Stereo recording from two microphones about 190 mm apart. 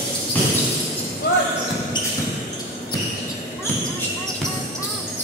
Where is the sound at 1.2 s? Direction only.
65° left (ahead or behind).